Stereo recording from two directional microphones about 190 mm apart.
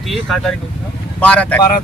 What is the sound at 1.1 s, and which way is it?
Speech, 5° left (ahead or behind).